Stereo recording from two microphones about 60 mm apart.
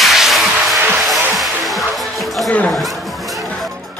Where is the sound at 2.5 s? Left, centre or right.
Left.